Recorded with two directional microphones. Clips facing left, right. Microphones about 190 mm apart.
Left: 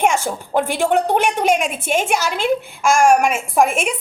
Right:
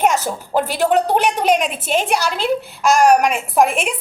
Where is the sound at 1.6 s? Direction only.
50° left (ahead or behind).